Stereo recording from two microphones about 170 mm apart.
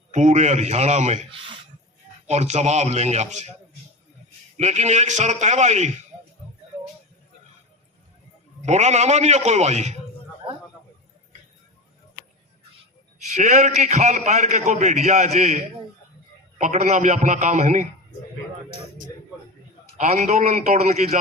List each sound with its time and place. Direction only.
0.1 s a man's voice: 45° right (ahead or behind)
4.5 s a man's voice: 40° right (ahead or behind)
8.6 s a man's voice: 40° right (ahead or behind)
13.3 s a man's voice: 45° right (ahead or behind)
20.0 s a man's voice: 40° right (ahead or behind)